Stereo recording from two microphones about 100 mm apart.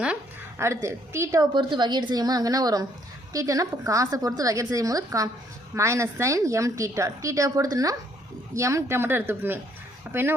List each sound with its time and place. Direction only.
0.6 s speech: 30° right (ahead or behind)
1.4 s a woman's voice: 50° right (ahead or behind); by 10.3 s 20° right (ahead or behind)